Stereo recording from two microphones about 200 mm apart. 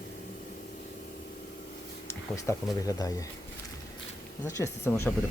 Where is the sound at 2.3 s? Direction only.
15° left (ahead or behind).